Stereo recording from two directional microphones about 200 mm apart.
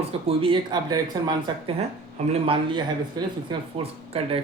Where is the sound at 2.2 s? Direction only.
30° right (ahead or behind).